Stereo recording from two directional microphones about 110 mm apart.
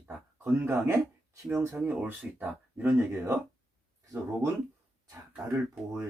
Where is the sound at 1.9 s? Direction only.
15° right (ahead or behind).